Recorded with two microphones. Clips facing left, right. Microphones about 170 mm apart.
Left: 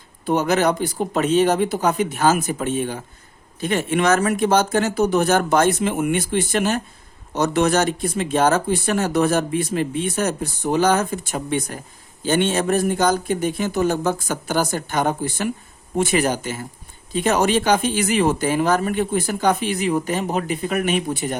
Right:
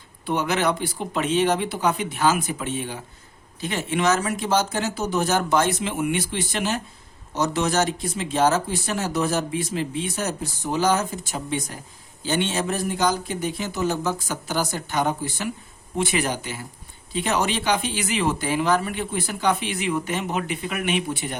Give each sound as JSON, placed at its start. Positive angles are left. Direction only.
{"t": 0.3, "sound": "speech", "side_deg": 40}